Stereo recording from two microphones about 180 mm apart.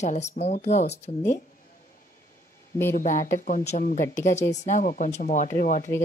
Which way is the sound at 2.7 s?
15° left (ahead or behind).